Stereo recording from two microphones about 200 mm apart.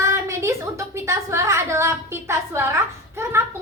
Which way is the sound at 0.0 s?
15° right (ahead or behind).